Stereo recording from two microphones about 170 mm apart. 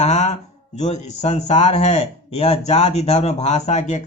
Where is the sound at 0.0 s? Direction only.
40° left (ahead or behind).